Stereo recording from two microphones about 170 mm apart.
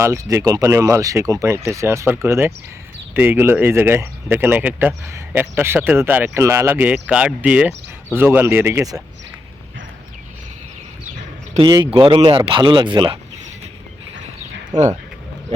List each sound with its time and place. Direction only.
0.0 s speech: 15° right (ahead or behind)
11.5 s speech: 25° right (ahead or behind)